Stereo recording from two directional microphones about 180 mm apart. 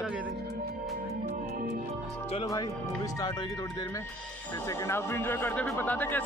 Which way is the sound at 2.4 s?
20° left (ahead or behind).